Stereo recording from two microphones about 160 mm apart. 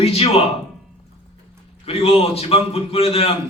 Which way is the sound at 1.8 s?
40° left (ahead or behind).